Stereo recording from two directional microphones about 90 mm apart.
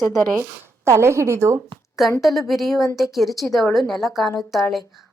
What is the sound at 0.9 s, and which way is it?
Speech, 30° right (ahead or behind).